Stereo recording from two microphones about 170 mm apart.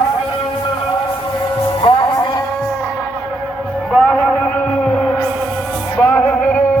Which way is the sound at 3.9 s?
Centre (ahead or behind).